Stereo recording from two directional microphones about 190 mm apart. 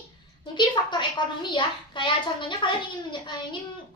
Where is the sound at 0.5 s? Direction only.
25° left (ahead or behind).